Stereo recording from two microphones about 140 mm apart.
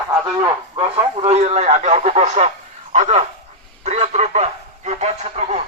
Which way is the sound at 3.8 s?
55° right (ahead or behind).